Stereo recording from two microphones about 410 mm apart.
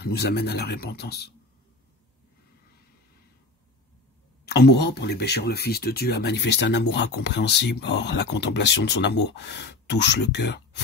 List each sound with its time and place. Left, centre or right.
0.0 s speech: left
4.5 s speech: left